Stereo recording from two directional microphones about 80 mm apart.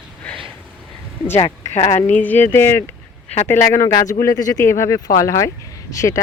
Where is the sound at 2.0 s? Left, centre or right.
Left.